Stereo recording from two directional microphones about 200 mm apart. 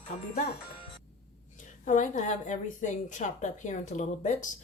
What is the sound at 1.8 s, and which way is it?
A woman's voice, 40° left (ahead or behind).